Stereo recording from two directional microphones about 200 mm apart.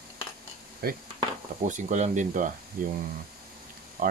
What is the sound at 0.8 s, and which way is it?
Speech, 50° right (ahead or behind).